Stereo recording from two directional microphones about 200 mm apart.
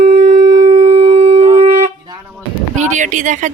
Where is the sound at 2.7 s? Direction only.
35° right (ahead or behind).